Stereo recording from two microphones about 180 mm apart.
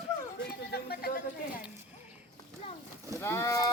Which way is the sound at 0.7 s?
60° left (ahead or behind).